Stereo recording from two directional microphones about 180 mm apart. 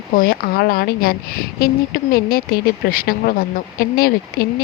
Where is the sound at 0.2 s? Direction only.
55° left (ahead or behind).